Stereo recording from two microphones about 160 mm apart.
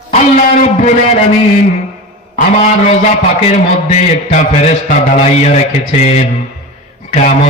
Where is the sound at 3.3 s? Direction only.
40° left (ahead or behind).